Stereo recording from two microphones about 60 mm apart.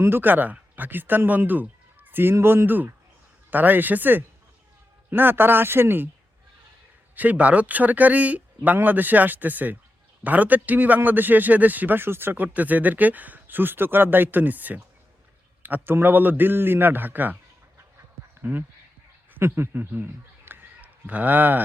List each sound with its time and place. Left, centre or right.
0.0 s speech: right
2.3 s a man's voice: right
7.2 s a man's voice: right
18.4 s a man's voice: right